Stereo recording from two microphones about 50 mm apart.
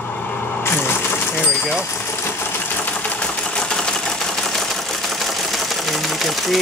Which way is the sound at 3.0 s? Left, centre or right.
Left.